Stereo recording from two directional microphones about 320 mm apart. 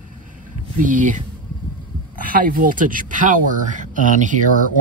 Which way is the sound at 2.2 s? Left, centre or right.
Right.